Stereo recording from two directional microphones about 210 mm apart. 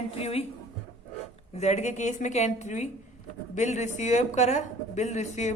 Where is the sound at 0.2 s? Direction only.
30° left (ahead or behind).